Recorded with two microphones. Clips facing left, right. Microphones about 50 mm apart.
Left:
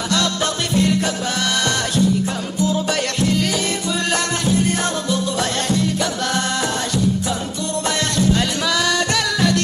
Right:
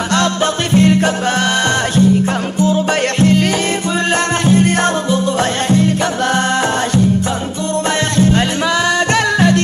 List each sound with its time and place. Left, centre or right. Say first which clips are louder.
0.7 s music: right 7 dB; right
2.6 s music: right 5 dB; right
4.5 s music: right 6 dB; right
8.2 s music: right 5 dB; right